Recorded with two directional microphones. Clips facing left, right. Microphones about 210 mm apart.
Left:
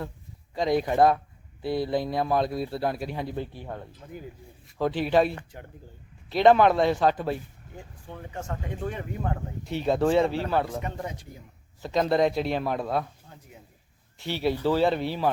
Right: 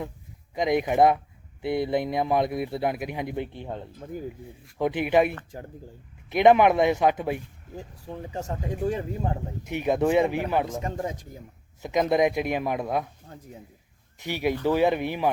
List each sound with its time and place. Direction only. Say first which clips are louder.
0.5 s speech: right 1 dB; 20° right (ahead or behind)
5.5 s speech: right 5 dB; 35° right (ahead or behind)
6.3 s speech: right 1 dB; 15° right (ahead or behind)
7.8 s speech: right 4 dB; 35° right (ahead or behind)
9.6 s speech: even; 15° right (ahead or behind)
11.8 s speech: right 1 dB; 15° right (ahead or behind)
14.3 s speech: even; 15° right (ahead or behind)